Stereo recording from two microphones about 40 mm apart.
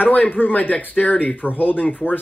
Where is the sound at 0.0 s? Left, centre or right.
Left.